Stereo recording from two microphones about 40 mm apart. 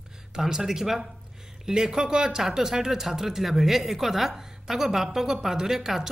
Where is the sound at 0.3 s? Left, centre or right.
Centre.